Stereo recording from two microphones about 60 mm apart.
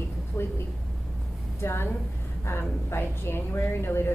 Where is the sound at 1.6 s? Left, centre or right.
Left.